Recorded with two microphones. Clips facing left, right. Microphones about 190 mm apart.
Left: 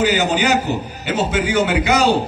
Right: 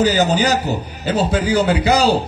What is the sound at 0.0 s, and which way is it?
A man's voice, 35° right (ahead or behind).